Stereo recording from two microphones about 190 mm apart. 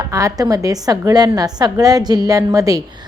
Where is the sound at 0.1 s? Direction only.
15° right (ahead or behind).